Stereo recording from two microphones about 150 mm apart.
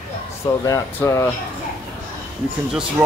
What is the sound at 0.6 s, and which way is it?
Speech, 20° left (ahead or behind).